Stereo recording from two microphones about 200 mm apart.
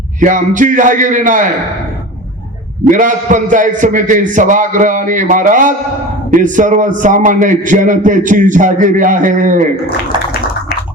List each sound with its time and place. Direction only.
0.2 s a man's voice: 40° right (ahead or behind)
2.9 s a man's voice: 40° right (ahead or behind)